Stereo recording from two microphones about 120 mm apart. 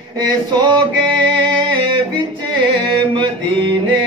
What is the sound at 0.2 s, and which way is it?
Mantra, 40° right (ahead or behind).